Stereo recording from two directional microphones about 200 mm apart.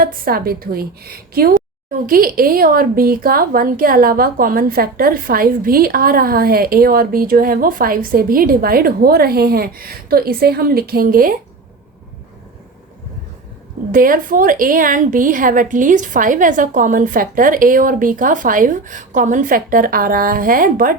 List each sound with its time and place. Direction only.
0.0 s a woman's voice: 50° right (ahead or behind)
13.9 s a woman's voice: 45° right (ahead or behind)